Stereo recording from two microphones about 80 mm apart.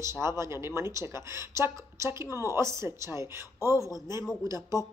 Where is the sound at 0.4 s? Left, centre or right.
Right.